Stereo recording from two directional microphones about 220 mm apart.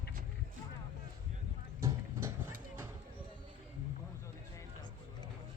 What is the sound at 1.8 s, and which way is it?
Clip-clop, 15° right (ahead or behind).